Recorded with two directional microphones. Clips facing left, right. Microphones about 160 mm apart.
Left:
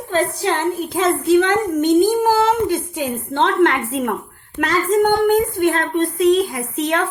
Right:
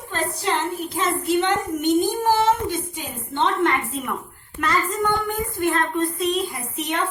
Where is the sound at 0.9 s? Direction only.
90° left.